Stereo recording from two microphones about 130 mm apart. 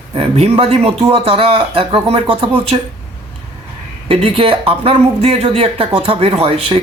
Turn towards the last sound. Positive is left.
turn(degrees=-45)  # may be behind; listen again after turning